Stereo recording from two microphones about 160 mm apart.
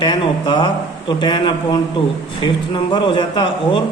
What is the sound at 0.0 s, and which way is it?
A man's voice, 30° left (ahead or behind).